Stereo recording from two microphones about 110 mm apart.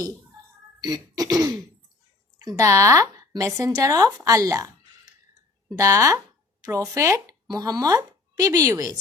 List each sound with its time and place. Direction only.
0.8 s throat clearing: 35° right (ahead or behind)
2.4 s speech: 35° right (ahead or behind)